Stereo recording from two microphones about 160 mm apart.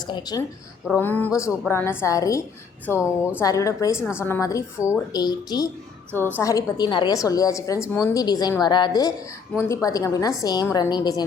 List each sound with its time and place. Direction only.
0.1 s a woman's voice: 25° left (ahead or behind)
0.9 s a woman's voice: 10° left (ahead or behind); by 11.3 s 25° left (ahead or behind)